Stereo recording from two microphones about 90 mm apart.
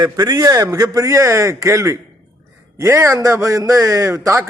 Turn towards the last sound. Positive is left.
turn(degrees=-35)  # may be behind; listen again after turning